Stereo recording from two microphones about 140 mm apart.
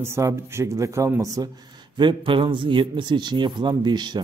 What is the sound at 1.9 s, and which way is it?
Speech, 35° right (ahead or behind).